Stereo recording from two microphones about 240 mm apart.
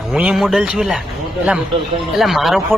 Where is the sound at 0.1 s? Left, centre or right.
Centre.